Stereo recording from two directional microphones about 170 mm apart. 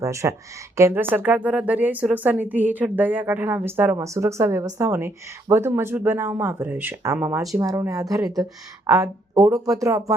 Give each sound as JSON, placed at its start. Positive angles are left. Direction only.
{"t": 0.0, "sound": "speech", "side_deg": -15}